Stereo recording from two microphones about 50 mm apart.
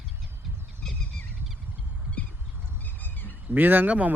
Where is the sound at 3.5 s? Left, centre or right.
Right.